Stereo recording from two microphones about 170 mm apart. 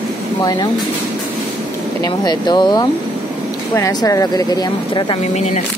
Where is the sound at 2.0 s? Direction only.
25° left (ahead or behind).